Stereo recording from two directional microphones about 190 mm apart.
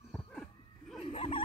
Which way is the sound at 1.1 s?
30° left (ahead or behind).